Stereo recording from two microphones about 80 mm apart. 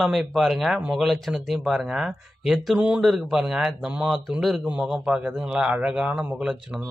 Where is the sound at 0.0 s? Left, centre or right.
Centre.